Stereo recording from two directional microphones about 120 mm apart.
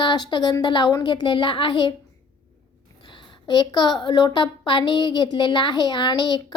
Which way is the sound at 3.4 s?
35° left (ahead or behind).